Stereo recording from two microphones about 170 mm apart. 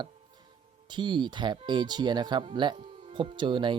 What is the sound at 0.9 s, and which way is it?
Speech, 25° right (ahead or behind).